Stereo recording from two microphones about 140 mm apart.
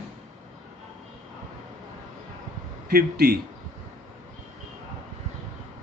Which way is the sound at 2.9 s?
90° right.